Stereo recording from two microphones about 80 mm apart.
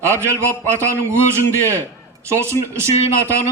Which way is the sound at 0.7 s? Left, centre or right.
Right.